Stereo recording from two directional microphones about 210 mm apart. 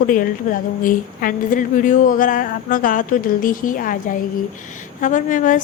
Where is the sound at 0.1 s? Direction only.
40° left (ahead or behind).